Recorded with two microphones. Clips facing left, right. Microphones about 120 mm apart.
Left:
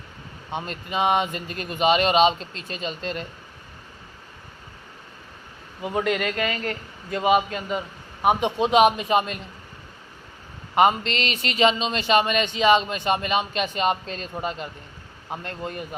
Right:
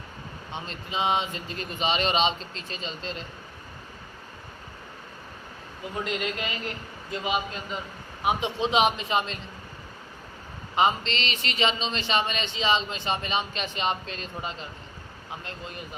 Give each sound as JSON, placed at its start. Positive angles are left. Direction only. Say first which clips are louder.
{"t": 0.5, "sound": "speech", "louder": "left 5 dB", "side_deg": 55}
{"t": 5.8, "sound": "speech", "louder": "left 6 dB", "side_deg": 65}
{"t": 10.8, "sound": "speech", "louder": "left 5 dB", "side_deg": 50}